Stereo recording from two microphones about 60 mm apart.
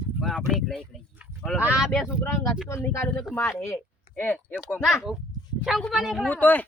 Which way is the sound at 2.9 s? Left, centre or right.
Left.